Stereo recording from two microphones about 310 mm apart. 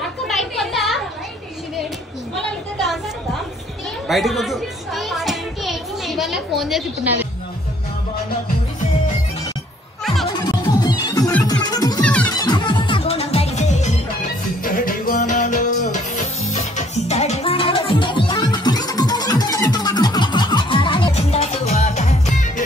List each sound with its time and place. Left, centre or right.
0.3 s a sound: centre
4.1 s children playing: centre
10.5 s music: centre